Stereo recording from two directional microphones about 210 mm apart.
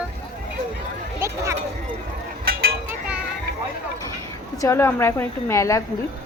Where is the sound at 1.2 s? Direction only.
10° right (ahead or behind).